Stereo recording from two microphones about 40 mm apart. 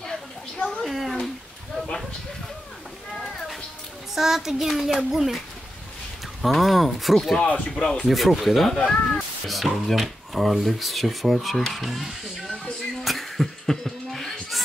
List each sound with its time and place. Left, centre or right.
0.0 s a sound: centre
0.8 s a sound: centre
4.1 s a child's voice: centre
6.4 s speech: centre
7.4 s speech: left
7.8 s speech: centre
8.1 s speech: centre
8.7 s speech: centre
9.5 s speech: centre
13.0 s music: centre